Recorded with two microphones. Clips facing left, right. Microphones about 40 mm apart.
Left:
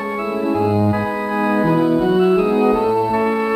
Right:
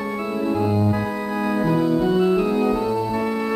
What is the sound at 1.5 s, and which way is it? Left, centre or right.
Music, centre.